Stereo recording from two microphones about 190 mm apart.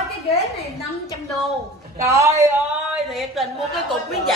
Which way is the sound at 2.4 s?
Centre (ahead or behind).